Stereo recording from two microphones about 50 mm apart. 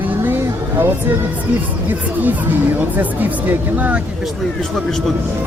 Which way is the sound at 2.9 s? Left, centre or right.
Right.